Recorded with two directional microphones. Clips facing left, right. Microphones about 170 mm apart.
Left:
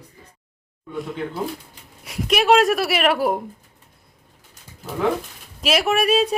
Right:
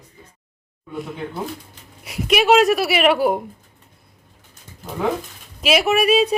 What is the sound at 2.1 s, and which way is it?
A woman's voice, centre (ahead or behind).